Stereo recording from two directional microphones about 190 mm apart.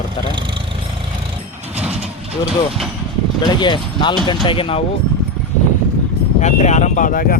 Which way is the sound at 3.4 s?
25° left (ahead or behind).